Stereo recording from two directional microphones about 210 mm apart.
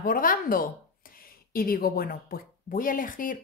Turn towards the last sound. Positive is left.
turn(degrees=40)  # may be behind; listen again after turning